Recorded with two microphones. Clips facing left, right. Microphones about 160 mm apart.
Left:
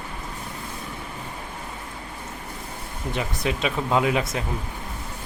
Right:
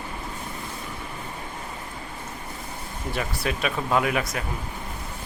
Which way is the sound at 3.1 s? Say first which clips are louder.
Left 2 dB; 20° left (ahead or behind).